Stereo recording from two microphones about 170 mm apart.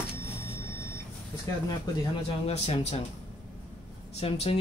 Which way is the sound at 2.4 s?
40° left (ahead or behind).